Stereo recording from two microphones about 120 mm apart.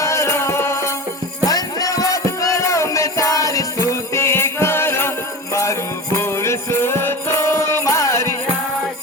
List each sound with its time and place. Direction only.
0.0 s music: 25° left (ahead or behind)
6.1 s music: 20° left (ahead or behind)